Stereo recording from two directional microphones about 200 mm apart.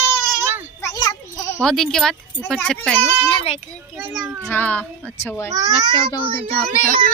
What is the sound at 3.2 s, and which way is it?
Speech, 25° left (ahead or behind).